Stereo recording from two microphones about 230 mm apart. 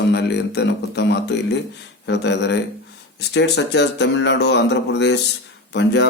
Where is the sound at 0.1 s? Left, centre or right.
Left.